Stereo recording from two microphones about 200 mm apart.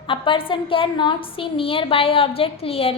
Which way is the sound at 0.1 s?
25° left (ahead or behind).